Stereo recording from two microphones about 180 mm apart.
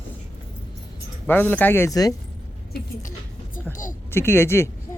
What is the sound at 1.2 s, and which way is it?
Speech, 10° left (ahead or behind).